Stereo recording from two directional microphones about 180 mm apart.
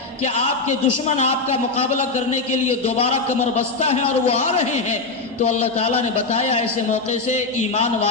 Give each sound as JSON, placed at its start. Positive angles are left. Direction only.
{"t": 0.2, "sound": "a man's voice", "side_deg": 40}